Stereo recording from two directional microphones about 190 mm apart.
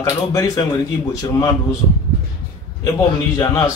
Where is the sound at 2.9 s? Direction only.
20° left (ahead or behind).